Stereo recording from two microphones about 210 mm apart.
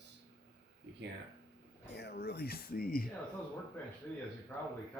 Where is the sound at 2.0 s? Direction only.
50° left (ahead or behind).